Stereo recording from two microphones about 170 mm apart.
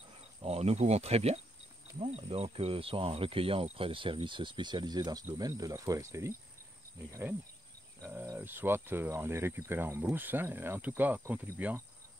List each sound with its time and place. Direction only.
0.4 s speech: 35° right (ahead or behind); by 6.3 s 20° right (ahead or behind)
7.1 s cricket: 15° right (ahead or behind)